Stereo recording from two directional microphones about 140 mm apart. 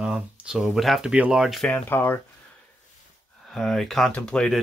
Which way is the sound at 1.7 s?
15° left (ahead or behind).